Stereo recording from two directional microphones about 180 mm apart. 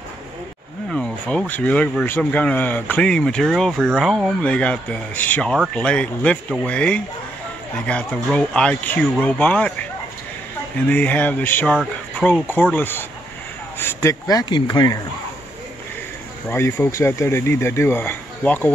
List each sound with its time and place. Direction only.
0.8 s a sound: 5° left (ahead or behind)
1.5 s speech: 5° left (ahead or behind)
11.7 s speech: centre (ahead or behind)
12.7 s speech: 10° left (ahead or behind)
16.4 s speech: 15° left (ahead or behind)